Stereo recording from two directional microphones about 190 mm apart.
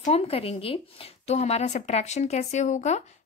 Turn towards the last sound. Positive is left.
turn(degrees=35)  # may be behind; listen again after turning